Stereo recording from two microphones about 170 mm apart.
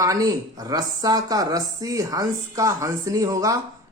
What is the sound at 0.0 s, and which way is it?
A woman's voice, 20° right (ahead or behind).